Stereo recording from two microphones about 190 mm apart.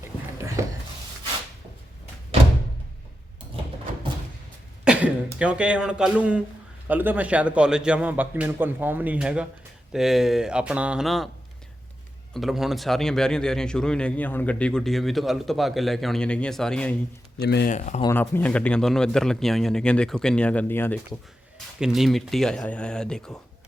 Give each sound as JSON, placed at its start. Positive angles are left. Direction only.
{"t": 0.3, "sound": "a sound", "side_deg": -15}
{"t": 4.9, "sound": "a man's voice", "side_deg": -5}
{"t": 12.3, "sound": "a man's voice", "side_deg": 0}
{"t": 17.4, "sound": "speech", "side_deg": 60}
{"t": 17.7, "sound": "speech", "side_deg": 40}
{"t": 18.1, "sound": "a man's voice", "side_deg": 10}
{"t": 21.8, "sound": "a man's voice", "side_deg": 0}